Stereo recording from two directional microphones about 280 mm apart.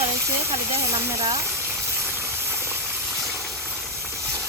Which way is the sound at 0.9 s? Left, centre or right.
Centre.